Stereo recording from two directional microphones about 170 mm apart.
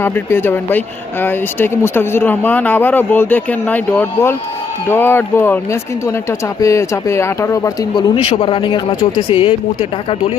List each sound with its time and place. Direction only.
0.0 s speech: 15° left (ahead or behind)
6.6 s speech: 20° left (ahead or behind)
8.1 s speech: 35° left (ahead or behind)